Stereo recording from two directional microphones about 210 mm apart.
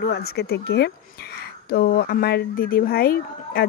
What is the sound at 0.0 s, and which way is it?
Speech, 50° left (ahead or behind).